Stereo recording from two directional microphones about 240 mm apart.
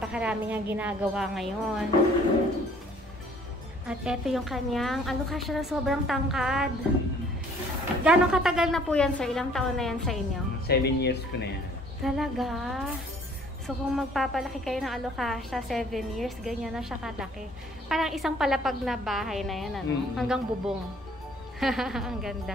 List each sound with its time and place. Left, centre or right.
0.1 s a woman's voice: centre
3.8 s a woman's voice: centre
8.0 s a woman's voice: centre
10.7 s speech: left
12.0 s a woman's voice: centre